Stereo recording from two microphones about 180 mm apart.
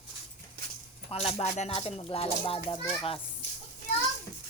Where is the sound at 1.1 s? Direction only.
30° left (ahead or behind).